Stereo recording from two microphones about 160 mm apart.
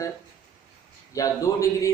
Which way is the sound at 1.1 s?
20° left (ahead or behind).